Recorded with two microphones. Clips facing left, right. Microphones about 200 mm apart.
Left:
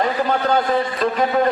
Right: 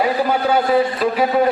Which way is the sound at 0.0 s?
10° right (ahead or behind).